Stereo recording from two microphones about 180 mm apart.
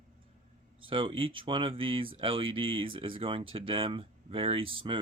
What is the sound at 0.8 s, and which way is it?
Speech, 30° right (ahead or behind).